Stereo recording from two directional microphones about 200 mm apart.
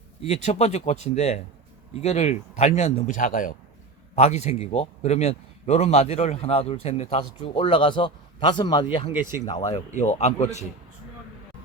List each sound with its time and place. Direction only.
0.2 s a man's voice: 35° left (ahead or behind)
9.9 s speech: 35° left (ahead or behind)